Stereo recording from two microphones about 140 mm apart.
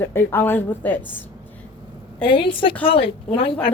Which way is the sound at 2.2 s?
35° left (ahead or behind).